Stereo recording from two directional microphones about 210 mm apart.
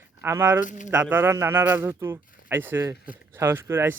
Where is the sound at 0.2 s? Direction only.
10° right (ahead or behind).